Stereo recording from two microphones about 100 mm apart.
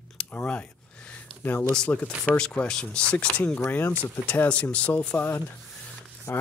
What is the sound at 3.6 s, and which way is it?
Speech, 25° left (ahead or behind).